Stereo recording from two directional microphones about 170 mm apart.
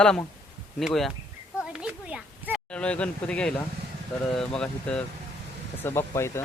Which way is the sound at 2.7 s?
5° left (ahead or behind).